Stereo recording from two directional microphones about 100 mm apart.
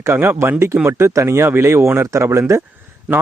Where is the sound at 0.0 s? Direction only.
25° right (ahead or behind).